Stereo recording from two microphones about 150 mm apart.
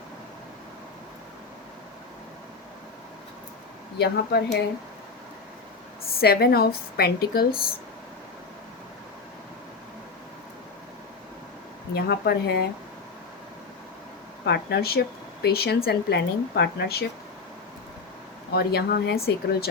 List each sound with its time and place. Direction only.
3.9 s speech: 90° left
6.1 s speech: 90° left
11.9 s speech: 90° left
14.4 s speech: 90° left
18.5 s speech: 90° left